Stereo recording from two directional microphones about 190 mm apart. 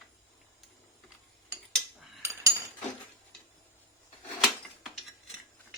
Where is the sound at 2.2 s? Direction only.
15° right (ahead or behind).